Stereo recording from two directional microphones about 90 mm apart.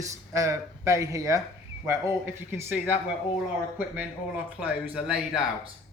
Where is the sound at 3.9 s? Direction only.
20° right (ahead or behind).